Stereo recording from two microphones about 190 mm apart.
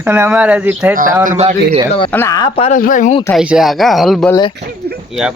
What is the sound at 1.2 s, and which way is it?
Speech, 40° right (ahead or behind).